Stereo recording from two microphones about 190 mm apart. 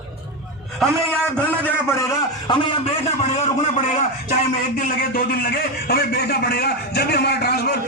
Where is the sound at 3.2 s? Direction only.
35° left (ahead or behind).